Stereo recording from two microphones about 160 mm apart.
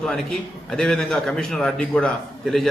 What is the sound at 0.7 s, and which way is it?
A man's voice, 5° left (ahead or behind).